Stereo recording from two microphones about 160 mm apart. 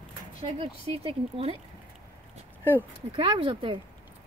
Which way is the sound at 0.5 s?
35° right (ahead or behind).